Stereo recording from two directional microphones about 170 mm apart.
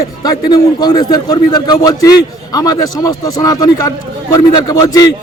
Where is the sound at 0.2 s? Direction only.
25° left (ahead or behind).